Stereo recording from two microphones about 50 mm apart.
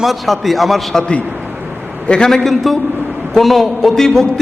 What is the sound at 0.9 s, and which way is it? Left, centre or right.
A man's voice, centre.